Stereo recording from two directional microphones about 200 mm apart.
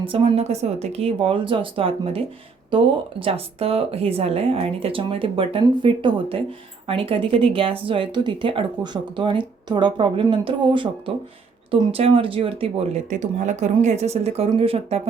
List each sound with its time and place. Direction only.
0.0 s a woman's voice: 25° right (ahead or behind)